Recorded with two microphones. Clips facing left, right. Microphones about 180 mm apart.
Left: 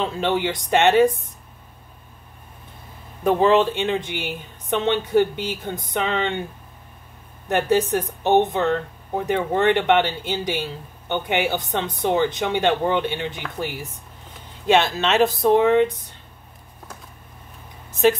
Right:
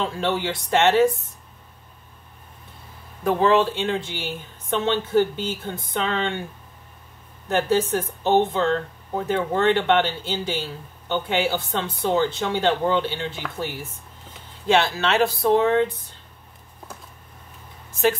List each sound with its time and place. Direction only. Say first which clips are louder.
0.0 s speech: left 2 dB; 20° left (ahead or behind)
3.3 s speech: left 2 dB; 15° left (ahead or behind)
7.4 s speech: left 1 dB; 20° left (ahead or behind)